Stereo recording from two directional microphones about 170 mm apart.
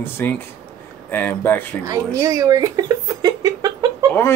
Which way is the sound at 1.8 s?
20° right (ahead or behind).